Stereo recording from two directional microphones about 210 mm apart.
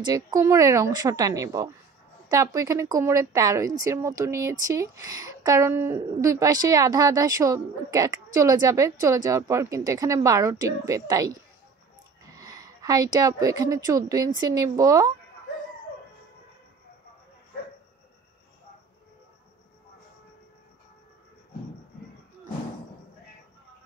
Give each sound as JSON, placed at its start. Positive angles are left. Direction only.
{"t": 0.0, "sound": "a woman's voice", "side_deg": -15}
{"t": 12.4, "sound": "a woman's voice", "side_deg": -15}